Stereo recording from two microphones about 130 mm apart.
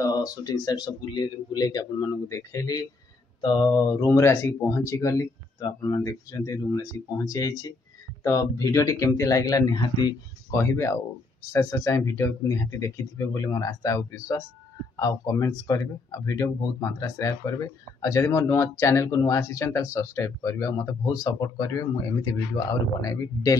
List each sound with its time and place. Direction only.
0.0 s speech: 30° left (ahead or behind)